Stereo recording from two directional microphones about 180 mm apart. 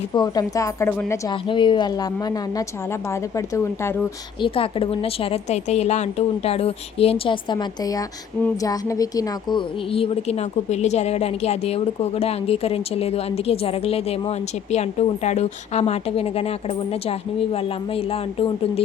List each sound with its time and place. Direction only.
0.1 s a woman's voice: 25° left (ahead or behind)
1.3 s a woman's voice: 25° left (ahead or behind)
4.4 s a woman's voice: 30° left (ahead or behind)